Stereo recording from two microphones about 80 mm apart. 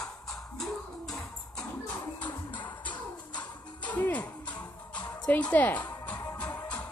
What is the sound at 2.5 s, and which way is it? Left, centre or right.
Music, left.